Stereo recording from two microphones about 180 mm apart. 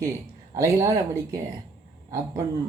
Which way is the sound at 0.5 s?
15° right (ahead or behind).